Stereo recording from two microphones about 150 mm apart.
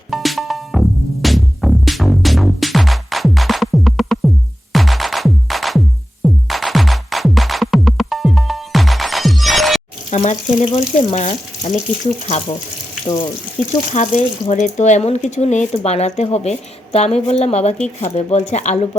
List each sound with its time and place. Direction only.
0.1 s music: centre (ahead or behind)
10.1 s speech: 50° left (ahead or behind)
13.6 s speech: 5° left (ahead or behind)
13.9 s speech: 50° left (ahead or behind)